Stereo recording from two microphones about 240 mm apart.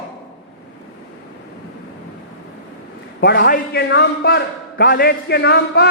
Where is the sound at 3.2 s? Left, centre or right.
Left.